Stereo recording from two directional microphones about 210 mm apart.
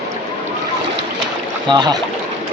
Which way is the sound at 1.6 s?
20° right (ahead or behind).